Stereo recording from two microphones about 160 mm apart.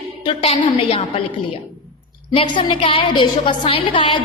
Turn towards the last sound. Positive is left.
turn(degrees=30)  # may be behind; listen again after turning